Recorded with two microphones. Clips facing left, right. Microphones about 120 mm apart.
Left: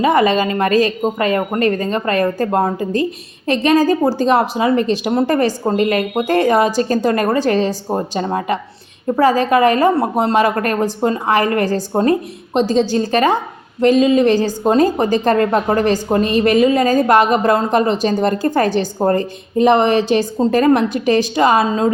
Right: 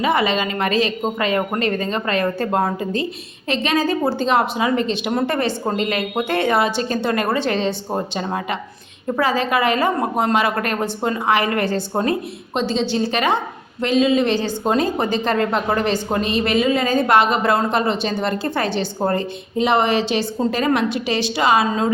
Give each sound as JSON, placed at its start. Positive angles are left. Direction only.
{"t": 0.0, "sound": "a woman's voice", "side_deg": 40}